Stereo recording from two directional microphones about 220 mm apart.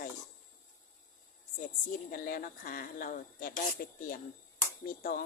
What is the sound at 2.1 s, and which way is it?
Speech, 40° left (ahead or behind).